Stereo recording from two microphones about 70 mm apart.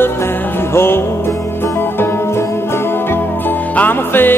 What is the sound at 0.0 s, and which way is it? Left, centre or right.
Music, left.